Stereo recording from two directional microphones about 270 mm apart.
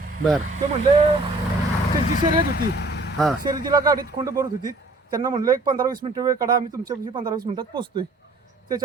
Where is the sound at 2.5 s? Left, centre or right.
Left.